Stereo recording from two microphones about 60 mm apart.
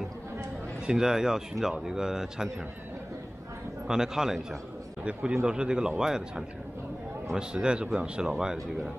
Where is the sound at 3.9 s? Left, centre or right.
Centre.